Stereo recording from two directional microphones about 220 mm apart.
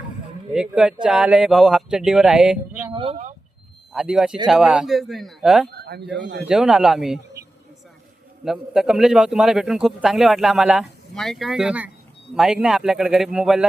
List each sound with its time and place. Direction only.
0.5 s a man's voice: 5° right (ahead or behind)
2.9 s speech: 25° right (ahead or behind)
3.9 s a man's voice: 5° right (ahead or behind)
5.6 s speech: 45° right (ahead or behind)
6.5 s a man's voice: centre (ahead or behind)
8.4 s a man's voice: centre (ahead or behind)